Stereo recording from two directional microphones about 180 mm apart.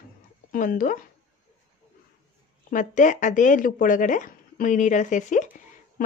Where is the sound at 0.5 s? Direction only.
50° left (ahead or behind).